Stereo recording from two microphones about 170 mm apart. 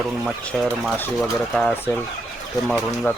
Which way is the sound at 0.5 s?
Centre (ahead or behind).